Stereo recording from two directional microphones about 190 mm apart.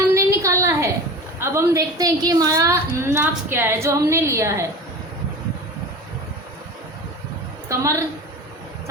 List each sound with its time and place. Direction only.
0.1 s a sound: 15° right (ahead or behind)
1.4 s a woman's voice: 15° right (ahead or behind)
7.7 s a woman's voice: 15° right (ahead or behind)